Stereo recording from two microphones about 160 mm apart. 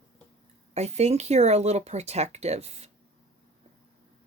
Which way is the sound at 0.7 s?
40° right (ahead or behind).